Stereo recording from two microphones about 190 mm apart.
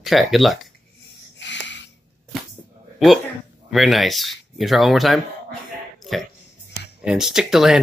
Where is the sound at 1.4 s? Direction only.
70° left (ahead or behind).